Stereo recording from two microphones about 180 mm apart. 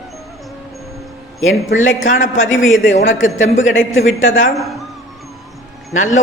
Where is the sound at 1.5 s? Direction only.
90° left.